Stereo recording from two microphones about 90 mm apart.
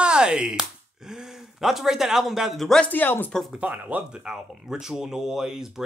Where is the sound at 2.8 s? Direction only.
20° left (ahead or behind).